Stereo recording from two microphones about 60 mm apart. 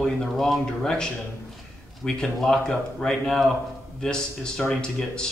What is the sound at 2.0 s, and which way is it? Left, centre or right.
Speech, centre.